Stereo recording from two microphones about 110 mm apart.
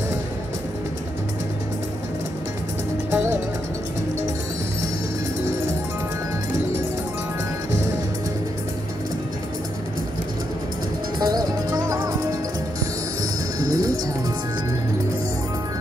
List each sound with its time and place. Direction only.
11.1 s music: 40° right (ahead or behind)
13.6 s music: 35° right (ahead or behind)